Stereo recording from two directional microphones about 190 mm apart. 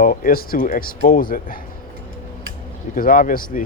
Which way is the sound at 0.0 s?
50° left (ahead or behind).